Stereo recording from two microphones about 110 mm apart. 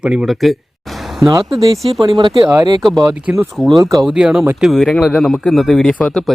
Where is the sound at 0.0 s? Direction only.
10° right (ahead or behind).